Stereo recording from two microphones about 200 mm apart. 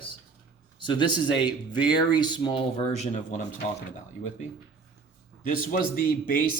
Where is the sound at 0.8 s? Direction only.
25° left (ahead or behind).